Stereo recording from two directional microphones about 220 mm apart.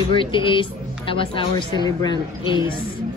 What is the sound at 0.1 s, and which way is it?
A woman's voice, 25° left (ahead or behind).